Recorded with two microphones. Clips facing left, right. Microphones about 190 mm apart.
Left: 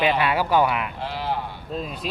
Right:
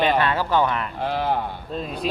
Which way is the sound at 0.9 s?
50° right (ahead or behind).